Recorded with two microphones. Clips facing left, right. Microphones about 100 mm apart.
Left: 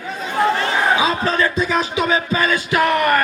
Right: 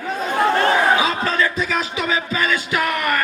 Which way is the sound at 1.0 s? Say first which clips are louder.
Left 2 dB; 25° left (ahead or behind).